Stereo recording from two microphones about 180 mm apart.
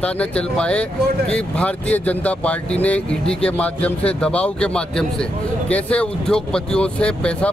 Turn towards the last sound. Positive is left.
turn(degrees=5)  # may be behind; listen again after turning